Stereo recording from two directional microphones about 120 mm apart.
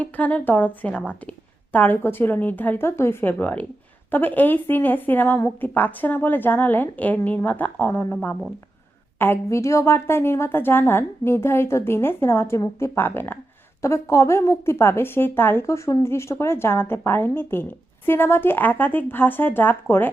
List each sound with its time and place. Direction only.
0.0 s a woman's voice: 15° left (ahead or behind)